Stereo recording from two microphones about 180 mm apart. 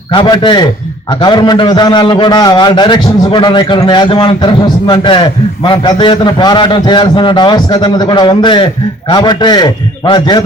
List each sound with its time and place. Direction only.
0.1 s a man's voice: 25° left (ahead or behind)